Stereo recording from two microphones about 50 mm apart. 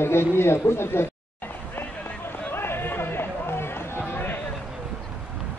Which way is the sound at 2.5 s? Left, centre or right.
Left.